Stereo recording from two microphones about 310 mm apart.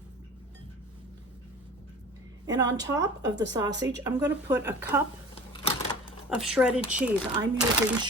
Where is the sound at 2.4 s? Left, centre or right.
Centre.